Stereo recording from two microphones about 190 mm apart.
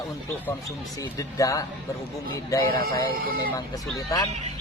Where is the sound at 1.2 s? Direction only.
15° left (ahead or behind).